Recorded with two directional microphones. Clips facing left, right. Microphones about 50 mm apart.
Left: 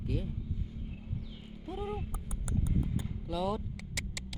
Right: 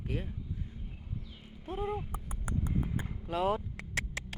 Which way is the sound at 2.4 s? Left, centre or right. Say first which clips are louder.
Even; right.